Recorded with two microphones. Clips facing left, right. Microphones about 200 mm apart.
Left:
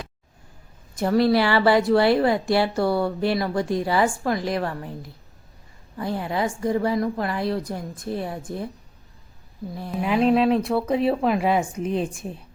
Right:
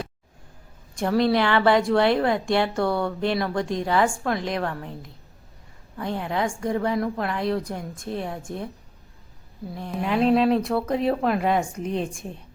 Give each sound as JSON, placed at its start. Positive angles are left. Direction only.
{"t": 0.9, "sound": "a woman's voice", "side_deg": 5}
{"t": 9.7, "sound": "a woman's voice", "side_deg": 5}